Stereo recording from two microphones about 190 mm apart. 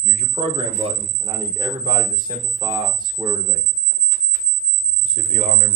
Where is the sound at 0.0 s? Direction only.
30° right (ahead or behind).